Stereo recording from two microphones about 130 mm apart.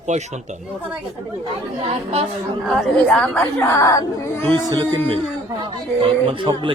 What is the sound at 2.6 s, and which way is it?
Speech, centre (ahead or behind).